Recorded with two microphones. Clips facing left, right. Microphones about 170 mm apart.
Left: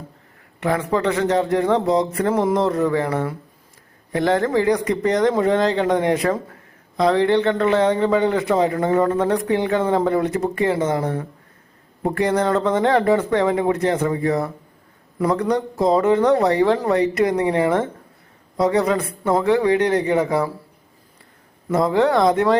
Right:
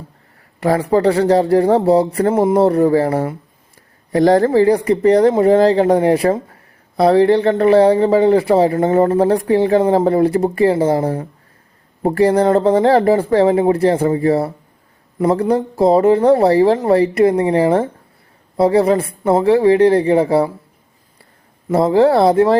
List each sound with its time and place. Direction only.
0.6 s speech: 35° right (ahead or behind)
21.7 s speech: 30° right (ahead or behind)